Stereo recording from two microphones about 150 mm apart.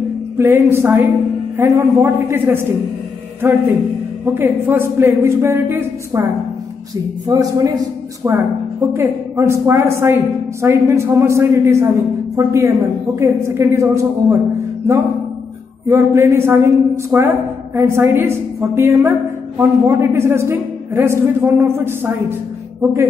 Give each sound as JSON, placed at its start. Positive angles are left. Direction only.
{"t": 0.4, "sound": "a man's voice", "side_deg": -15}
{"t": 7.2, "sound": "a woman's voice", "side_deg": -25}
{"t": 15.9, "sound": "a man's voice", "side_deg": -20}